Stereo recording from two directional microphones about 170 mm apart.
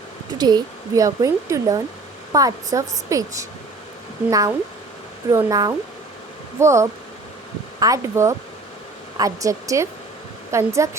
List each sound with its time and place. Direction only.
0.3 s speech: 25° right (ahead or behind)